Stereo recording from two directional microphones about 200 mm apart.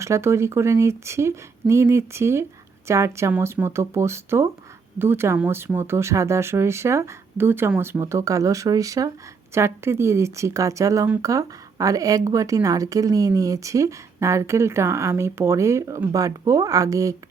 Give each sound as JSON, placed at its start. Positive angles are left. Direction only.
{"t": 0.0, "sound": "speech", "side_deg": -15}